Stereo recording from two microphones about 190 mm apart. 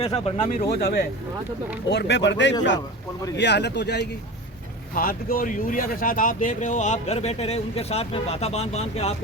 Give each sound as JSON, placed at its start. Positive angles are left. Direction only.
{"t": 0.0, "sound": "speech", "side_deg": 30}
{"t": 1.9, "sound": "speech", "side_deg": 65}
{"t": 4.9, "sound": "speech", "side_deg": 50}